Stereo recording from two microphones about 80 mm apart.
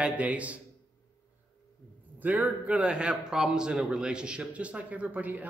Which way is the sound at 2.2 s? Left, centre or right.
Right.